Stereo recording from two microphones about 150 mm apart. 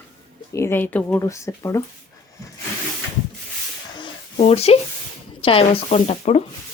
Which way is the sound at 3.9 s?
35° left (ahead or behind).